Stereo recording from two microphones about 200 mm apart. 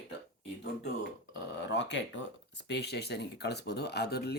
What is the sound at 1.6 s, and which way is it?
Speech, 60° left (ahead or behind).